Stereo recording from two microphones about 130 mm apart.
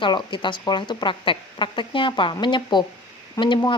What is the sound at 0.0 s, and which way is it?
A woman's voice, 40° left (ahead or behind).